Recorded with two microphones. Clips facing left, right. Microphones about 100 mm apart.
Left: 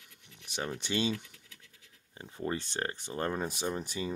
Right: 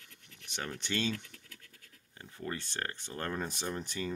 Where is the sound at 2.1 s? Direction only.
20° left (ahead or behind).